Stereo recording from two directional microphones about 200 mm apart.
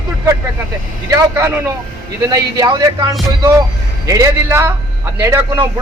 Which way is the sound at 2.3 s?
20° right (ahead or behind).